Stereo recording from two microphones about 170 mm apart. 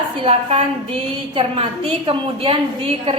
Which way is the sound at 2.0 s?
30° right (ahead or behind).